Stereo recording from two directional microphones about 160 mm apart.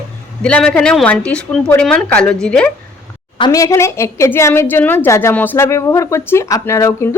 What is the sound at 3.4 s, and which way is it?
A woman's voice, 20° left (ahead or behind).